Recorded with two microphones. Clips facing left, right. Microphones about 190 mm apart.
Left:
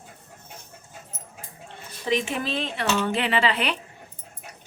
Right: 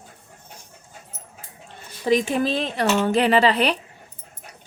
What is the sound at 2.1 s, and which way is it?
Speech, 40° right (ahead or behind).